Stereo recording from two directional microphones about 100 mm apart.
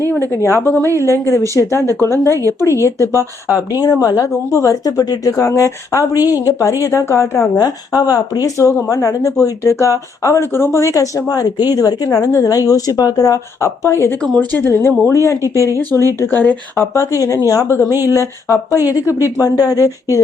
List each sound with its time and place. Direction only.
0.0 s speech: 20° left (ahead or behind)
2.3 s speech: 35° right (ahead or behind)
2.8 s speech: 30° left (ahead or behind)
16.2 s speech: 20° left (ahead or behind)